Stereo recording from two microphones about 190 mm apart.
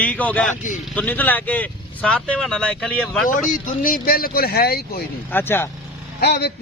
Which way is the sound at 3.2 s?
45° left (ahead or behind).